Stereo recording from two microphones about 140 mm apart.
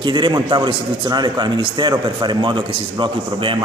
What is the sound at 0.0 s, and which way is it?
A man's voice, 35° right (ahead or behind).